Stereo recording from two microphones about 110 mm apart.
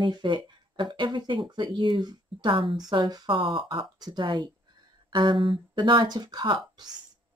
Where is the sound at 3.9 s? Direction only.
40° right (ahead or behind).